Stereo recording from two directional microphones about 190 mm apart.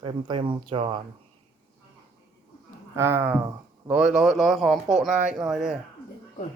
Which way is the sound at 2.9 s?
15° right (ahead or behind).